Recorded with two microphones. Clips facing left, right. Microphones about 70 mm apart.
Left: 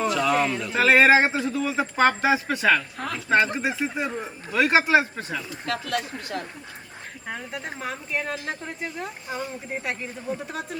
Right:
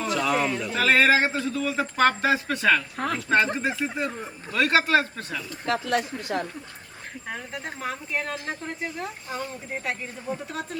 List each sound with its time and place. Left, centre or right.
0.1 s speech: centre
0.7 s speech: centre
5.6 s speech: right
7.3 s a woman's voice: centre